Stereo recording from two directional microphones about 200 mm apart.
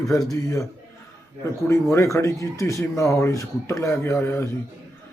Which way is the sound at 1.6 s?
15° left (ahead or behind).